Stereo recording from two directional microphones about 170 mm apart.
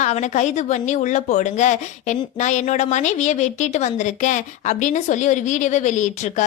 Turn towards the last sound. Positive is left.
turn(degrees=45)  # may be behind; listen again after turning